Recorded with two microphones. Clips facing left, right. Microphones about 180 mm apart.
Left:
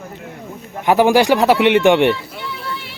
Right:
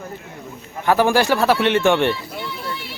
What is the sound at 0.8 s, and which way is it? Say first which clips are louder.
Speech: left 4 dB; 15° left (ahead or behind).